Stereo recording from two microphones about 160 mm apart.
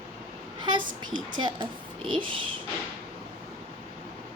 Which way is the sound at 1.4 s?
30° right (ahead or behind).